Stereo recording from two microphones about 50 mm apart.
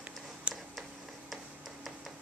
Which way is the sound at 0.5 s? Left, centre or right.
Right.